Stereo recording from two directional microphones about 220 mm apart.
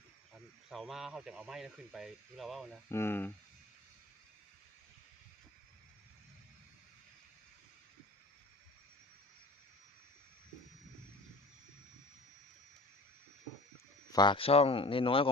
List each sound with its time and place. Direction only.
0.7 s speech: centre (ahead or behind)
2.9 s speech: 10° left (ahead or behind)
14.1 s speech: 20° left (ahead or behind)